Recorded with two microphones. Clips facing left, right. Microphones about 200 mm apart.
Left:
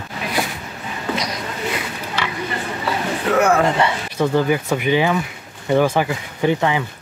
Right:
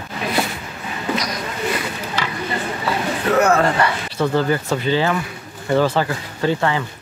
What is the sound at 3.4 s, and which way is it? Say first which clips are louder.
Speech: even; 15° left (ahead or behind).